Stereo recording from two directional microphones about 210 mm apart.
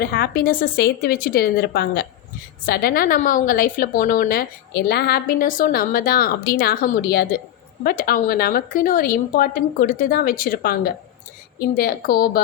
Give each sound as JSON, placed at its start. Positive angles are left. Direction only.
{"t": 0.0, "sound": "a woman's voice", "side_deg": 45}